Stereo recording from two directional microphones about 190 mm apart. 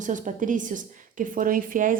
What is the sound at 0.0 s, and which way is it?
A woman's voice, 40° right (ahead or behind).